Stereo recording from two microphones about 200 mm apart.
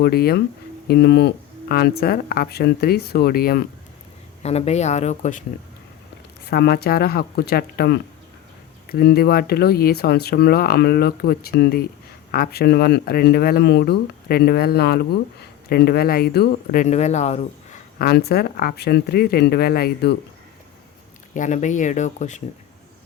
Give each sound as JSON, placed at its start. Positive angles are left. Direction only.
{"t": 0.0, "sound": "speech", "side_deg": 50}
{"t": 4.4, "sound": "speech", "side_deg": 30}
{"t": 6.4, "sound": "speech", "side_deg": 50}
{"t": 16.8, "sound": "speech", "side_deg": 35}
{"t": 18.0, "sound": "speech", "side_deg": 50}
{"t": 21.3, "sound": "speech", "side_deg": 40}